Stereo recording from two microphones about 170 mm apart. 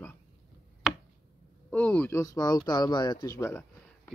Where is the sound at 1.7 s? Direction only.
10° left (ahead or behind).